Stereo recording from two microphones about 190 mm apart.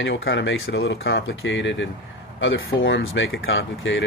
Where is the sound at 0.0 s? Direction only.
75° left (ahead or behind).